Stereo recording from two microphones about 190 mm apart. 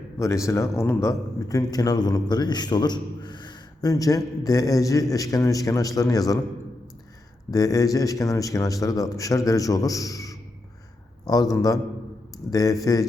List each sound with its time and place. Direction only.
0.4 s a man's voice: 15° left (ahead or behind)
7.5 s a man's voice: 20° left (ahead or behind)